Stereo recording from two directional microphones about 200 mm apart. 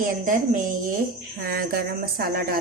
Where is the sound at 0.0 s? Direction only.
45° right (ahead or behind).